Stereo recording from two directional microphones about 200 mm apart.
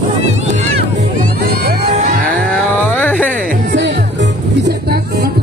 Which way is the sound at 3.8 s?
65° right (ahead or behind).